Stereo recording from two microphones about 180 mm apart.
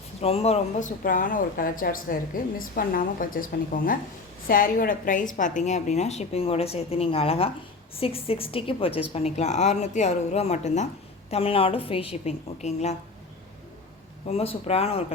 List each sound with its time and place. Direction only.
0.2 s a woman's voice: 35° left (ahead or behind)
1.0 s a woman's voice: 50° left (ahead or behind)
14.3 s a woman's voice: 35° left (ahead or behind)